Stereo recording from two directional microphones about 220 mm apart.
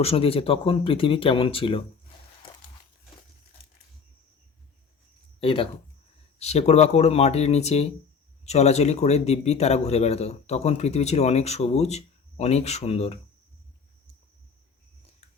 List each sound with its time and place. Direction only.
0.0 s a man's voice: 25° left (ahead or behind)
2.4 s crumpling: 20° left (ahead or behind)
5.4 s a man's voice: 25° left (ahead or behind)